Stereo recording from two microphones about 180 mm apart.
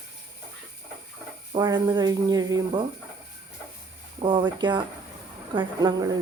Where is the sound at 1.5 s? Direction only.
25° right (ahead or behind).